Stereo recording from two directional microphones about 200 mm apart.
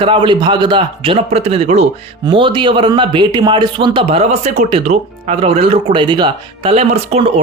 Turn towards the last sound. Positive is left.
turn(degrees=-30)  # may be behind; listen again after turning